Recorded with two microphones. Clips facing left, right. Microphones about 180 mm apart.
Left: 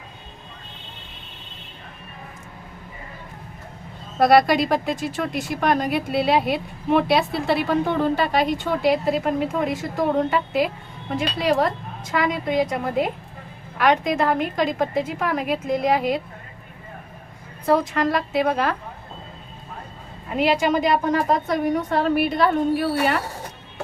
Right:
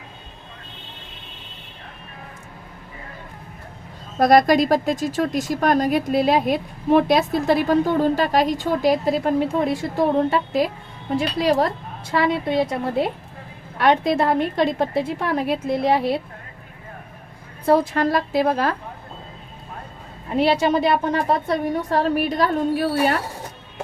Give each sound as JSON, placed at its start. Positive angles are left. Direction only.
{"t": 4.3, "sound": "speech", "side_deg": -40}
{"t": 17.7, "sound": "speech", "side_deg": -35}
{"t": 20.3, "sound": "speech", "side_deg": -35}